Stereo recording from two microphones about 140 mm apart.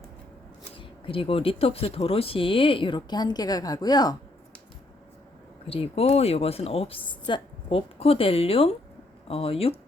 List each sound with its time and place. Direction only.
0.8 s speech: 40° left (ahead or behind)
5.6 s a woman's voice: 45° left (ahead or behind)